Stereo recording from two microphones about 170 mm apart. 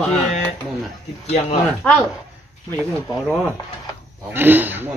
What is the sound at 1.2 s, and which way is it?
Speech, 40° left (ahead or behind).